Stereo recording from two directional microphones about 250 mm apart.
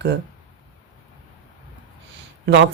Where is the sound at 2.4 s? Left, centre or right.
Right.